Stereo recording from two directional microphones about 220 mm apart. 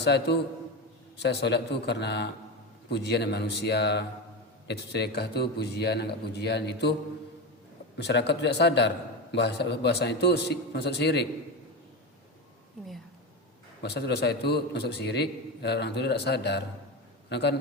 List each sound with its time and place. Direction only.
0.0 s a man's voice: 50° left (ahead or behind)
7.9 s a man's voice: 50° left (ahead or behind)
13.8 s a man's voice: 50° left (ahead or behind)